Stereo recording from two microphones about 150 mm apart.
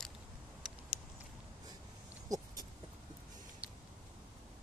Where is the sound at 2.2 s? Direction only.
25° right (ahead or behind).